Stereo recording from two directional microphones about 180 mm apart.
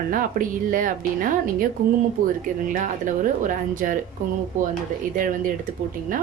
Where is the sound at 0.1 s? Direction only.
50° right (ahead or behind).